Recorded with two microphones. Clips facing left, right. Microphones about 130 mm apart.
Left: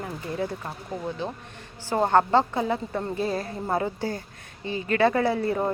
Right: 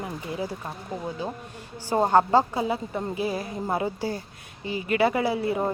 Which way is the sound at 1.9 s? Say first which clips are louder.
Right 1 dB; 15° right (ahead or behind).